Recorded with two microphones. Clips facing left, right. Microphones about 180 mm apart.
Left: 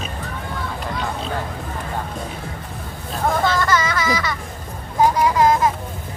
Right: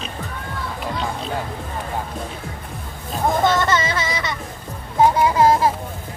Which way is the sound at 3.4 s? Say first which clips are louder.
Right 2 dB; 25° right (ahead or behind).